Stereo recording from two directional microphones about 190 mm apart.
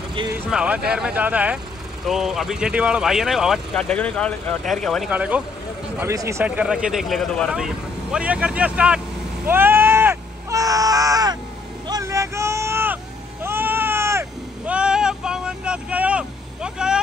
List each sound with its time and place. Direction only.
0.5 s speech: 5° right (ahead or behind)
9.5 s a sound: 10° right (ahead or behind)
11.9 s vehicle: 15° right (ahead or behind)